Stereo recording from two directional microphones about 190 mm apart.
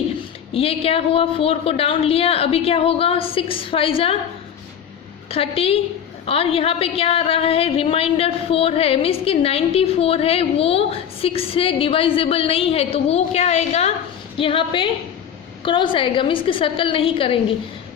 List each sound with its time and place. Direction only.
0.5 s a woman's voice: 30° left (ahead or behind)
5.3 s a woman's voice: 30° left (ahead or behind)